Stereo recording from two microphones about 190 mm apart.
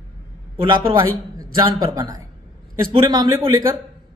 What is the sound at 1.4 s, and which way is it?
Speech, 20° right (ahead or behind).